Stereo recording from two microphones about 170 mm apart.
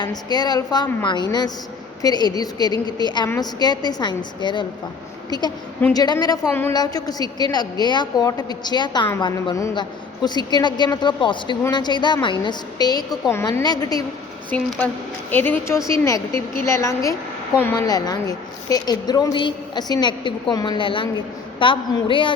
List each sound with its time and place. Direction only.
0.0 s a woman's voice: 25° left (ahead or behind)
6.5 s a woman's voice: 10° left (ahead or behind)
6.7 s a woman's voice: 25° left (ahead or behind)
14.5 s a woman's voice: 10° left (ahead or behind); by 22.3 s 30° left (ahead or behind)